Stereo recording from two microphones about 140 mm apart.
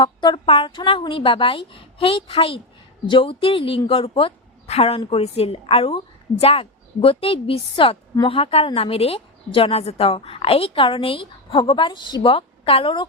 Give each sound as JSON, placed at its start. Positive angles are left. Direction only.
{"t": 0.0, "sound": "a woman's voice", "side_deg": 30}